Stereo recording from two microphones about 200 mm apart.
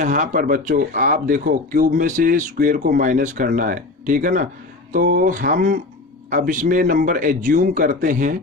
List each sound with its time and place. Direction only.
0.0 s speech: 40° right (ahead or behind)